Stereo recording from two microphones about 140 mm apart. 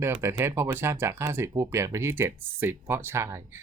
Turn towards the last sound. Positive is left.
turn(degrees=-20)  # may be behind; listen again after turning